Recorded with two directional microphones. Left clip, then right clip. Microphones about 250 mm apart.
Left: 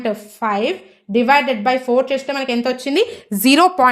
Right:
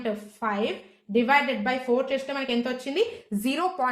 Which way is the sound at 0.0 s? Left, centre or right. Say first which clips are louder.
Left 8 dB; left.